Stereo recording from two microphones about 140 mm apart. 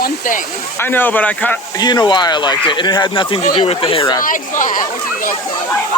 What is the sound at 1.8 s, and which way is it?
Speech, 30° left (ahead or behind).